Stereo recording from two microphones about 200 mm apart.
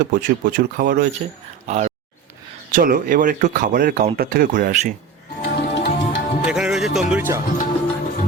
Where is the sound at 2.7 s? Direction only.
45° right (ahead or behind).